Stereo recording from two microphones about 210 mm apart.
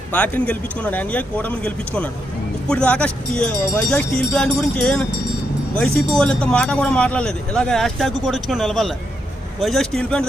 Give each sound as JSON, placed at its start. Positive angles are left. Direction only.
{"t": 0.1, "sound": "speech", "side_deg": 5}